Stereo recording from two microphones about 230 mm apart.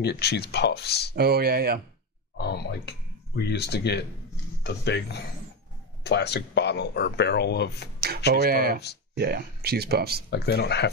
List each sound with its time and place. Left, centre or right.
0.0 s speech: left
1.1 s speech: right
2.3 s a sound: left
3.3 s speech: left
8.4 s speech: right
10.3 s speech: left